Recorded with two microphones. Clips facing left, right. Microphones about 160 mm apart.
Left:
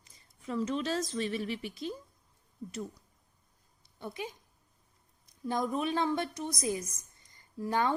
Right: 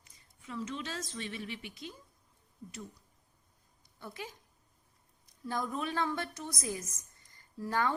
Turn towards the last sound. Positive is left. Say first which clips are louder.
# left 3 dB
turn(degrees=20)  # may be behind; listen again after turning